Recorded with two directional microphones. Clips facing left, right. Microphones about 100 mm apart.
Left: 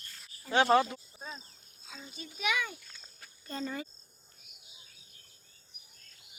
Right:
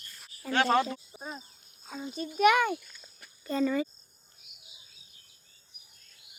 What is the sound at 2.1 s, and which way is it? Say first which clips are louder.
Speech: right 12 dB; 50° right (ahead or behind).